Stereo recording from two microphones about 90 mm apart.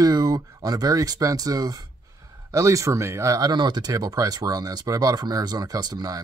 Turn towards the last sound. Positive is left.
turn(degrees=-45)  # may be behind; listen again after turning